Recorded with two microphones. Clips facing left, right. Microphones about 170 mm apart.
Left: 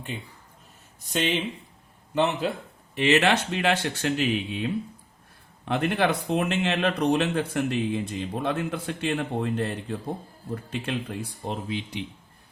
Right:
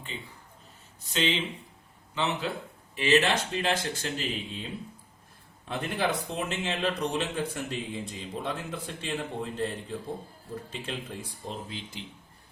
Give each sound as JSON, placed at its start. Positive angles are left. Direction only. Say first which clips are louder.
{"t": 1.1, "sound": "speech", "louder": "left 3 dB", "side_deg": 55}
{"t": 2.9, "sound": "a man's voice", "louder": "left 3 dB", "side_deg": 70}